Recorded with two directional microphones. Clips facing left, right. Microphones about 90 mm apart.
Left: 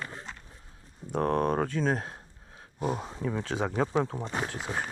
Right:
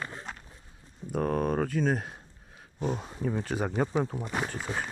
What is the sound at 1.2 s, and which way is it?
Speech, 65° left (ahead or behind).